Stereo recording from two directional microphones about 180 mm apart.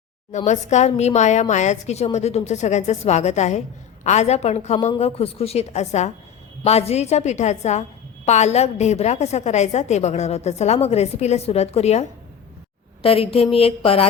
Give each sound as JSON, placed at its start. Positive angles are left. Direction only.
{"t": 0.3, "sound": "a woman's voice", "side_deg": 40}